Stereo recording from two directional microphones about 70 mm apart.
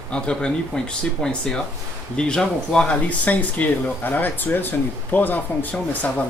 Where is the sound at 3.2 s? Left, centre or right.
Left.